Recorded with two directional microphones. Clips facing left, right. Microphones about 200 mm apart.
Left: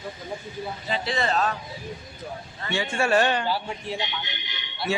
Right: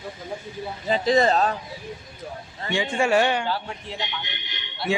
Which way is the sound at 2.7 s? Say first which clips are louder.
Right 2 dB; 15° right (ahead or behind).